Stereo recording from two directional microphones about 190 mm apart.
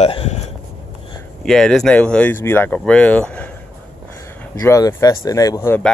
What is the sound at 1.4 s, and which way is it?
Speech, centre (ahead or behind).